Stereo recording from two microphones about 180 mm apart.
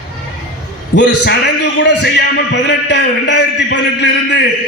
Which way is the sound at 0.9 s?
70° left (ahead or behind).